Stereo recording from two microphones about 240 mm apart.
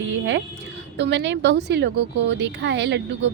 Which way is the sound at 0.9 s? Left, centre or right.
Right.